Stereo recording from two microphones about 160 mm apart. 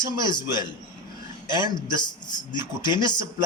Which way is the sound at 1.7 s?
25° left (ahead or behind).